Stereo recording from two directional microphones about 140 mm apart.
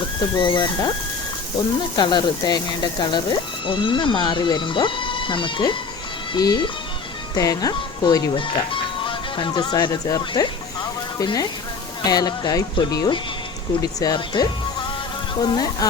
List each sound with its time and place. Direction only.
0.3 s speech: 30° left (ahead or behind)
2.0 s speech: 30° left (ahead or behind)